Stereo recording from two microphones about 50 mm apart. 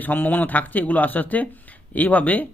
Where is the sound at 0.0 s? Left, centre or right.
Left.